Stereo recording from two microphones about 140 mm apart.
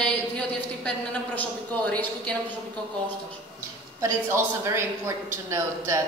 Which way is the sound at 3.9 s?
20° right (ahead or behind).